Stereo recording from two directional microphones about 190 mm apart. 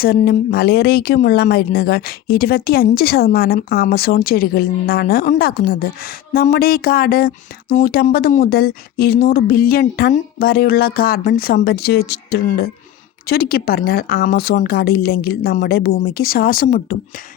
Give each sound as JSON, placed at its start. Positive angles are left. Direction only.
{"t": 0.0, "sound": "speech", "side_deg": 55}